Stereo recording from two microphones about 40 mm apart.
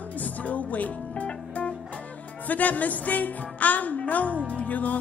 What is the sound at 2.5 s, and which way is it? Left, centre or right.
Speech, left.